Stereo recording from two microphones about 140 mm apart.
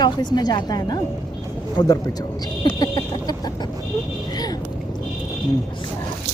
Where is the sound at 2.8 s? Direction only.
25° left (ahead or behind).